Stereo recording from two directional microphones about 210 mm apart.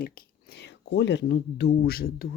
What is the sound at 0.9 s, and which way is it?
Speech, 55° left (ahead or behind).